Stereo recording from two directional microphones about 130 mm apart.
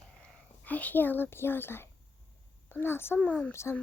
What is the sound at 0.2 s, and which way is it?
A woman's voice, 10° left (ahead or behind).